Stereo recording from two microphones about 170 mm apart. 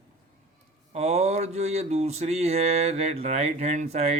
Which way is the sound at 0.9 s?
40° right (ahead or behind).